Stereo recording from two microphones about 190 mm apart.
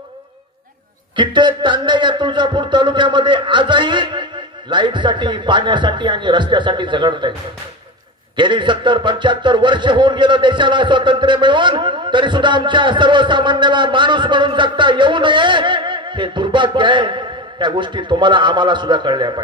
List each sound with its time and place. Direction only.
1.1 s speech: 25° right (ahead or behind)
8.4 s speech: 25° right (ahead or behind)